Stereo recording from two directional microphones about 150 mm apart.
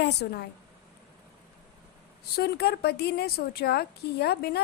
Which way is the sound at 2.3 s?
90° left.